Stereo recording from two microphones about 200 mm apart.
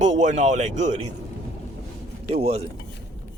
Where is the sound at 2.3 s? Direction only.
30° right (ahead or behind).